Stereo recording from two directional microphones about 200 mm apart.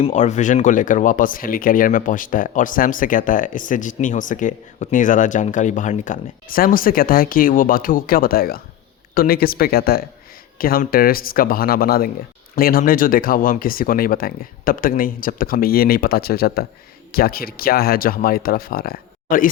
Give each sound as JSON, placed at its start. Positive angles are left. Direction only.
{"t": 0.0, "sound": "speech", "side_deg": 35}